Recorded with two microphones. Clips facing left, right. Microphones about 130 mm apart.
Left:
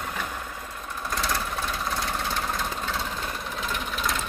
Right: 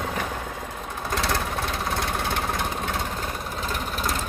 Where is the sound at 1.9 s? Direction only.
60° right (ahead or behind).